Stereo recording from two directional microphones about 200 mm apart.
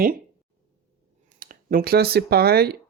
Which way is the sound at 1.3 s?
45° right (ahead or behind).